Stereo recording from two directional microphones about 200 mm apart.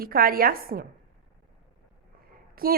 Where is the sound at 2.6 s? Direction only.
45° right (ahead or behind).